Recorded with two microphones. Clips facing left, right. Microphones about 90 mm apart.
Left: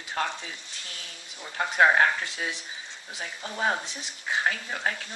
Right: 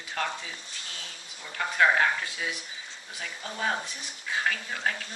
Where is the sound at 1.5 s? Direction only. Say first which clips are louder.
Left 3 dB; 30° left (ahead or behind).